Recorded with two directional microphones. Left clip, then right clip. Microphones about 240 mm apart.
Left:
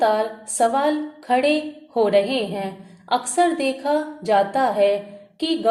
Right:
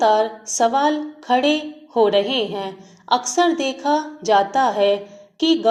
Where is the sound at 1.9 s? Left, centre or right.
Centre.